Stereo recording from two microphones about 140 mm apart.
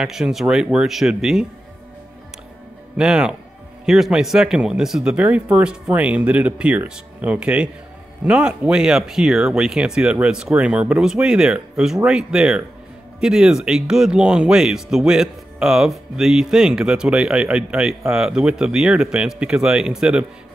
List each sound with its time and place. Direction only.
0.0 s speech: 5° right (ahead or behind)
3.0 s speech: 5° right (ahead or behind)